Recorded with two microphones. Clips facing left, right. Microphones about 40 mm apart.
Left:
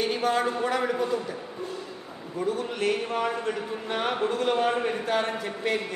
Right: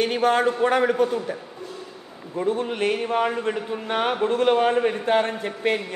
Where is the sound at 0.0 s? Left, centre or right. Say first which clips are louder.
Right 5 dB; right.